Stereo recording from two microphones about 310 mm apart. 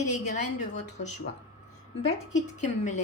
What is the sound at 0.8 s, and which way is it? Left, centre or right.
Speech, left.